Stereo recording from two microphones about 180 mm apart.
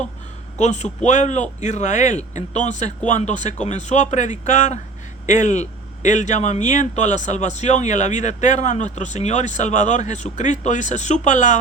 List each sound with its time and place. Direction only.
0.6 s speech: 40° left (ahead or behind)